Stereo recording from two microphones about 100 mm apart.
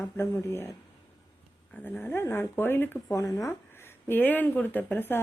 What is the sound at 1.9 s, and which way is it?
Speech, 20° left (ahead or behind).